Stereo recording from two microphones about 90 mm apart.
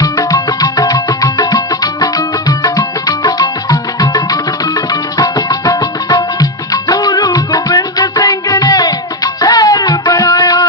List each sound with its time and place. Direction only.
0.0 s music: 40° left (ahead or behind)